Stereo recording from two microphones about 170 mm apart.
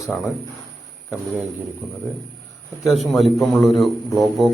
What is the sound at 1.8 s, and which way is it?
Speech, 5° right (ahead or behind).